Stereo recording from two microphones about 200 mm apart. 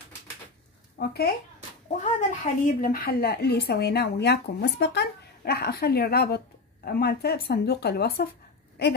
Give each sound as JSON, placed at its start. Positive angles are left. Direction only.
{"t": 0.9, "sound": "speech", "side_deg": 50}
{"t": 1.9, "sound": "a woman's voice", "side_deg": 40}